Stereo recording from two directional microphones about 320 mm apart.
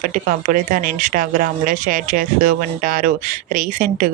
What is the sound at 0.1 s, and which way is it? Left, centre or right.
Speech, right.